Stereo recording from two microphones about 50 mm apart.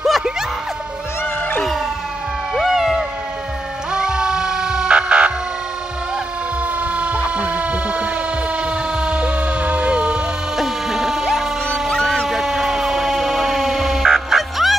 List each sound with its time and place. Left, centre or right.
2.5 s music: centre
6.8 s a sound: right
8.6 s vehicle: centre
10.6 s music: centre
12.3 s emergency vehicle: centre